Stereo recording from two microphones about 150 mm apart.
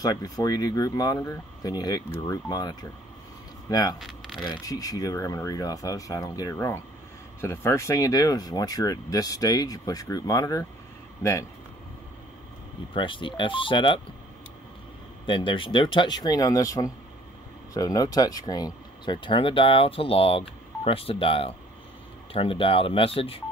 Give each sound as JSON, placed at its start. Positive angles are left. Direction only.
{"t": 0.0, "sound": "speech", "side_deg": 25}
{"t": 12.9, "sound": "speech", "side_deg": 35}
{"t": 15.2, "sound": "speech", "side_deg": 35}